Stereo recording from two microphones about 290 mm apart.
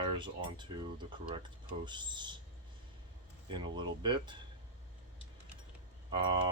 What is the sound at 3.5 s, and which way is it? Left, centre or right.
Speech, centre.